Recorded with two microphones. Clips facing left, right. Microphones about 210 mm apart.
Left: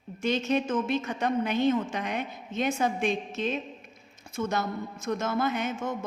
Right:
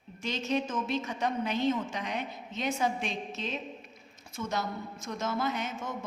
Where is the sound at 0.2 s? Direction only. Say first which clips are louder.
Left 5 dB; 55° left (ahead or behind).